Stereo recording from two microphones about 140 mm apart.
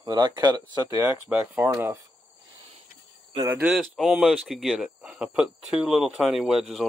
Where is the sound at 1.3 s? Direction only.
15° right (ahead or behind).